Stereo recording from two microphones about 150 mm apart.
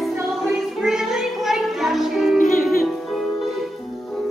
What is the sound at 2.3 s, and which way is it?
Music, 65° left (ahead or behind).